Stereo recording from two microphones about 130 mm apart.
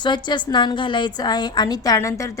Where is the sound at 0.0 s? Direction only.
35° left (ahead or behind).